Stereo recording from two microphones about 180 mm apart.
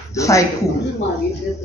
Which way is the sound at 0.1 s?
15° left (ahead or behind).